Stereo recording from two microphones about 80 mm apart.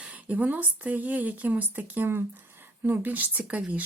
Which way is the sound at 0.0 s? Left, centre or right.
Centre.